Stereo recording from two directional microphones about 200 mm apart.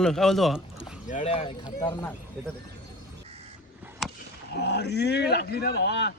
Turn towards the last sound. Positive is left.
turn(degrees=55)  # may be behind; listen again after turning